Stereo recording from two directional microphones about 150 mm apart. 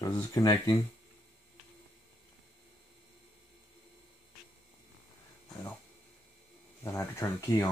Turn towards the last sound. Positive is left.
turn(degrees=20)  # may be behind; listen again after turning